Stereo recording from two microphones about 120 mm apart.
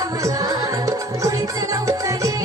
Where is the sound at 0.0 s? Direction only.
30° right (ahead or behind).